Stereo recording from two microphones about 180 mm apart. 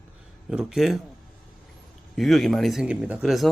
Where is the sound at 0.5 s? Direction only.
5° right (ahead or behind).